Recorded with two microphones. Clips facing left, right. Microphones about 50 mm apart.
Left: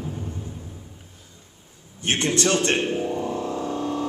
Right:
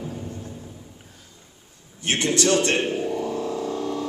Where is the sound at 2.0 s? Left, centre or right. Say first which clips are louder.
Even; left.